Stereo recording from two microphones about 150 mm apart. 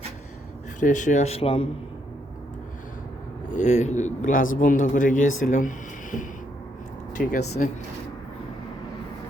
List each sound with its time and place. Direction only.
0.8 s speech: 55° left (ahead or behind); by 1.6 s 40° left (ahead or behind)
3.5 s speech: 50° left (ahead or behind)
7.3 s speech: 55° left (ahead or behind)